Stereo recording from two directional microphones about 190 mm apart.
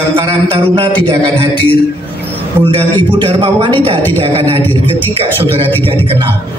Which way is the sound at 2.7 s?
30° right (ahead or behind).